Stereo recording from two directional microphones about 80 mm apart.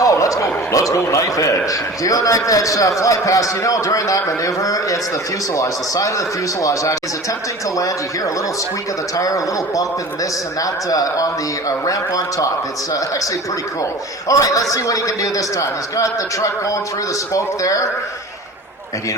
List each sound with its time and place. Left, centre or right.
0.0 s a man's voice: left
9.1 s a man's voice: left
14.3 s a man's voice: left